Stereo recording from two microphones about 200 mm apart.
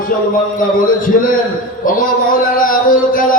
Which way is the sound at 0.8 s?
45° left (ahead or behind).